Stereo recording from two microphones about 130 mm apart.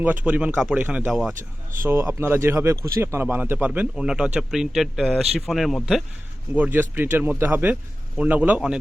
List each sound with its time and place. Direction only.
0.3 s speech: 10° right (ahead or behind)
1.9 s speech: 20° right (ahead or behind); by 6.0 s centre (ahead or behind)
6.5 s speech: 10° right (ahead or behind)